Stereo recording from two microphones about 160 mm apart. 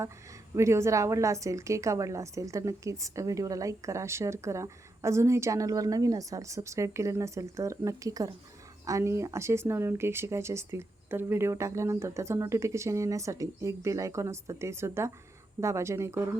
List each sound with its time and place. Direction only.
0.5 s a woman's voice: 15° right (ahead or behind)